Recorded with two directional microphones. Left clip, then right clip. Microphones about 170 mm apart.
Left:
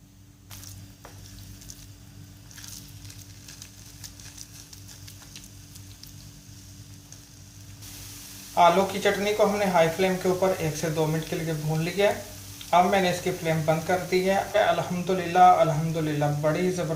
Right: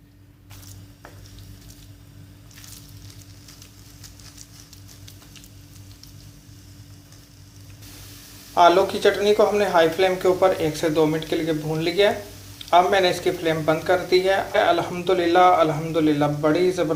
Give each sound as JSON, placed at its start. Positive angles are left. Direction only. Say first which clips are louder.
{"t": 8.5, "sound": "speech", "louder": "right 4 dB", "side_deg": -35}